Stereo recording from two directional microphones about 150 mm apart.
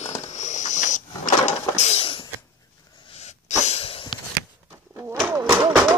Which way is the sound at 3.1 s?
50° left (ahead or behind).